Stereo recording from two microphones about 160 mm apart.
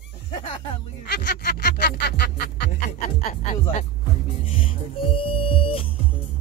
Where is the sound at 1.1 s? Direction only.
85° left.